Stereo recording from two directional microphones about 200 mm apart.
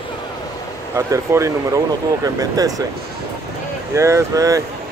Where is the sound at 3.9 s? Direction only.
15° right (ahead or behind).